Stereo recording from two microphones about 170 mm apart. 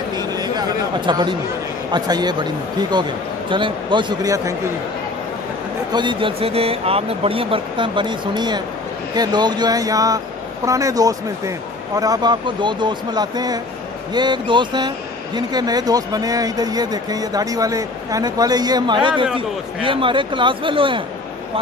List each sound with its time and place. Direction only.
0.1 s a sound: 25° right (ahead or behind)
1.9 s speech: 25° right (ahead or behind)
5.9 s speech: 25° right (ahead or behind)